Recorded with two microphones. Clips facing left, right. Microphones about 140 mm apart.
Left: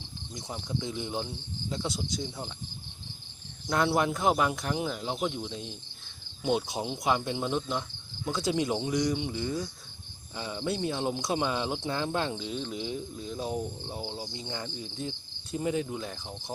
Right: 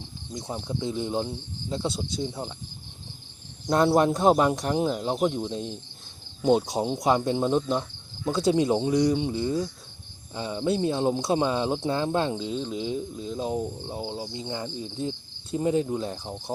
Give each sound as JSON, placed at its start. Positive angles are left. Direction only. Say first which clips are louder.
{"t": 0.3, "sound": "speech", "louder": "right 4 dB", "side_deg": -30}
{"t": 3.7, "sound": "speech", "louder": "right 6 dB", "side_deg": -35}